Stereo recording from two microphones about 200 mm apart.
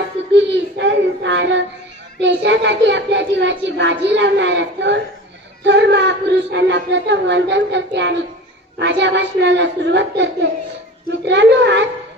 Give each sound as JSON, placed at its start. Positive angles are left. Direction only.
{"t": 0.3, "sound": "child singing", "side_deg": -65}
{"t": 2.1, "sound": "speech", "side_deg": -60}